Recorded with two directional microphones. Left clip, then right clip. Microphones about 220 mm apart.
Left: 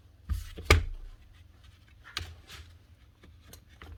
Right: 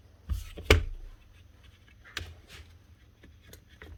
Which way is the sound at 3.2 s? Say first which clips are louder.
Right 1 dB; centre (ahead or behind).